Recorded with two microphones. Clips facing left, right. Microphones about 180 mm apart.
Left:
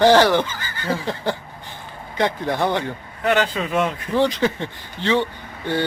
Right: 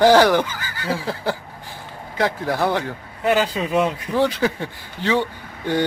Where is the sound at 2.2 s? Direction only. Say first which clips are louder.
Even; 5° right (ahead or behind).